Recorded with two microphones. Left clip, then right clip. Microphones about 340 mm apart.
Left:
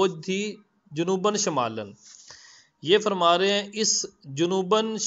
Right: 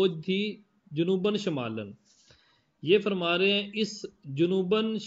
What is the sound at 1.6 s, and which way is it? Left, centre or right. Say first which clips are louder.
A man's voice: left 8 dB; centre.